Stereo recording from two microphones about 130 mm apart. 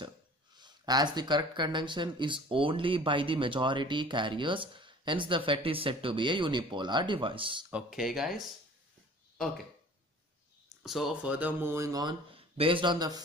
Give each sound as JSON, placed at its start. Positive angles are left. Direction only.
{"t": 0.6, "sound": "speech", "side_deg": -35}
{"t": 7.7, "sound": "speech", "side_deg": -5}
{"t": 10.8, "sound": "speech", "side_deg": 0}
{"t": 11.3, "sound": "speech", "side_deg": -15}